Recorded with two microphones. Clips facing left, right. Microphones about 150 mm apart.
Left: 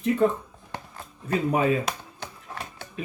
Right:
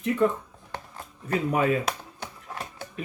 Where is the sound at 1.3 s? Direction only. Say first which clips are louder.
Left 1 dB; 25° left (ahead or behind).